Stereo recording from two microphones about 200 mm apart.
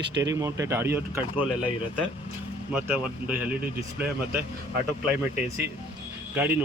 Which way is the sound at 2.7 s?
5° right (ahead or behind).